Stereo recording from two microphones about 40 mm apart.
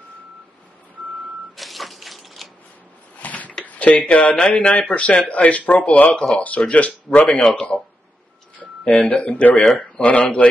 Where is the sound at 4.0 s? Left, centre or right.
Left.